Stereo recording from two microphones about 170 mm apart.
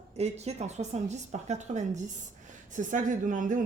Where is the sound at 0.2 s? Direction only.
40° right (ahead or behind).